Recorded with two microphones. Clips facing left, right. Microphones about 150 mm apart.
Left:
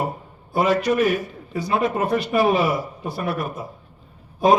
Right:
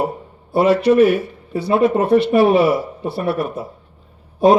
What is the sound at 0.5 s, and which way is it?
A man's voice, 30° right (ahead or behind).